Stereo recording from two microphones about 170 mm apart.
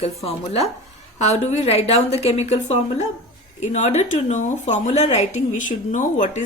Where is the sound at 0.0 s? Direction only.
35° left (ahead or behind).